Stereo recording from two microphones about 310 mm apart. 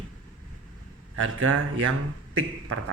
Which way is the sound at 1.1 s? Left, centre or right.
Right.